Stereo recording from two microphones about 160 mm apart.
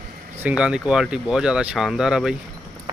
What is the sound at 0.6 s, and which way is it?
Speech, 5° right (ahead or behind).